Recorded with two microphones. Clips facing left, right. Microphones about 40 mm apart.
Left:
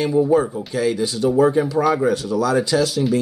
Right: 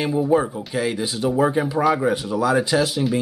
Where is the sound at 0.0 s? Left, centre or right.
Centre.